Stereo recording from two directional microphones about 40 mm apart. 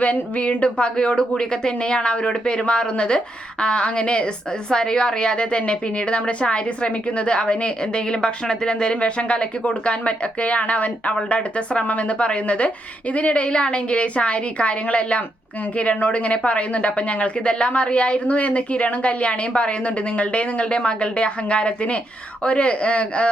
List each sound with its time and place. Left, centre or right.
0.0 s a woman's voice: left